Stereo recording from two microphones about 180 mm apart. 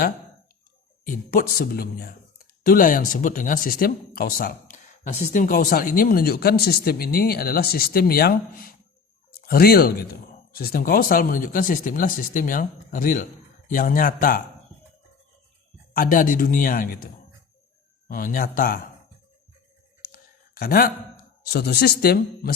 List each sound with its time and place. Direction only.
1.0 s speech: 50° left (ahead or behind)
15.9 s speech: 55° left (ahead or behind)
18.1 s speech: 50° left (ahead or behind)
20.1 s a sound: 55° left (ahead or behind)
21.4 s speech: 60° left (ahead or behind)